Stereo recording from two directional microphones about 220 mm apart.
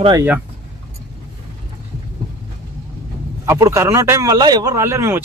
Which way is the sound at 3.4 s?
10° right (ahead or behind).